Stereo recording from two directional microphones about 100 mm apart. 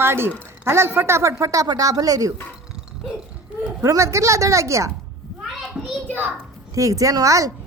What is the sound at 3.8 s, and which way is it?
Speech, 30° right (ahead or behind).